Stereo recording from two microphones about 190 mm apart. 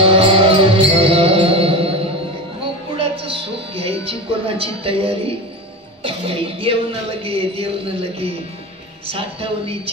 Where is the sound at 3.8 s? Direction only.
30° right (ahead or behind).